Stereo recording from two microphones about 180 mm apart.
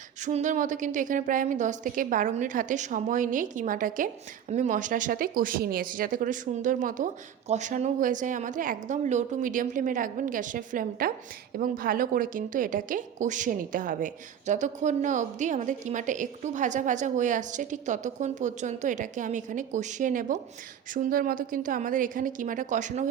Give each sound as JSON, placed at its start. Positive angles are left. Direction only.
{"t": 0.3, "sound": "a woman's voice", "side_deg": -40}